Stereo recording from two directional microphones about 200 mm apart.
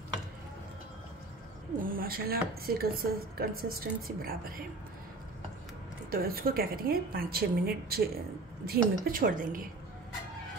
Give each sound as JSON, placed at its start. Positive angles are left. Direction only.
{"t": 1.8, "sound": "a sound", "side_deg": -45}
{"t": 2.6, "sound": "a woman's voice", "side_deg": -50}
{"t": 6.0, "sound": "a woman's voice", "side_deg": -45}